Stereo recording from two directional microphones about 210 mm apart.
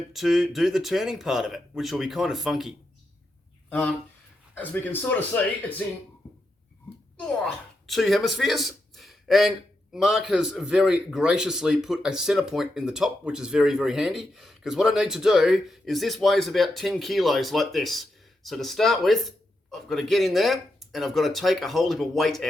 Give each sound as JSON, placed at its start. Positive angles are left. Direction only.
{"t": 0.1, "sound": "speech", "side_deg": 0}
{"t": 7.2, "sound": "speech", "side_deg": 0}